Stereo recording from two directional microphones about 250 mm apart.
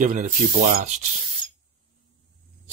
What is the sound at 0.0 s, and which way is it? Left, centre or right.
Speech, right.